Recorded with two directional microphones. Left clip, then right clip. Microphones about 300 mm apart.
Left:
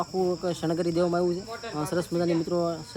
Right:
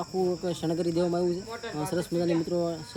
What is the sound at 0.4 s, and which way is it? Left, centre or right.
Speech, centre.